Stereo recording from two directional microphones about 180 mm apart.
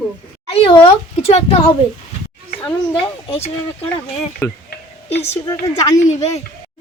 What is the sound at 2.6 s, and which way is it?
Speech, 30° left (ahead or behind).